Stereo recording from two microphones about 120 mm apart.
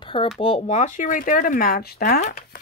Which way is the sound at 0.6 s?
80° left.